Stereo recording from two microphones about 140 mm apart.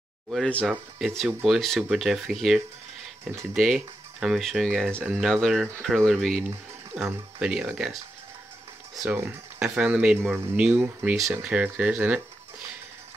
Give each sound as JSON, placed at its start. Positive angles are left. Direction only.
{"t": 0.3, "sound": "speech", "side_deg": 5}
{"t": 9.2, "sound": "speech", "side_deg": -20}
{"t": 9.8, "sound": "speech", "side_deg": -10}